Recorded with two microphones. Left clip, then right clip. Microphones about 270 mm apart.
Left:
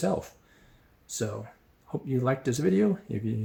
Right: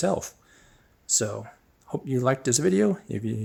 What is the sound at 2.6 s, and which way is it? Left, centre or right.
Speech, right.